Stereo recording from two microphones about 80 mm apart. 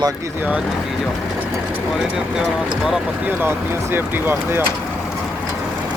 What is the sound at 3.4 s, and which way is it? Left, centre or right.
Speech, right.